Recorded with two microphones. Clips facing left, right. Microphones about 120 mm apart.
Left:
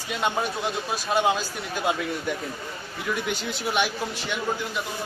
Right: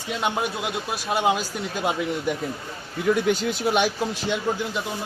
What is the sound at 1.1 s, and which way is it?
A woman's voice, 15° right (ahead or behind).